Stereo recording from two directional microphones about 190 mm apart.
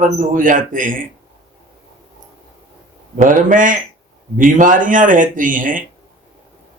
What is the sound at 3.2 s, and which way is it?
Speech, 45° right (ahead or behind).